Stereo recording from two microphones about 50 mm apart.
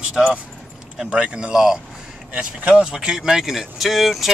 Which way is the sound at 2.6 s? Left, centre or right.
Right.